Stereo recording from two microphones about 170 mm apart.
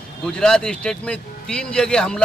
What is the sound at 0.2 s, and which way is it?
A man's voice, 5° left (ahead or behind).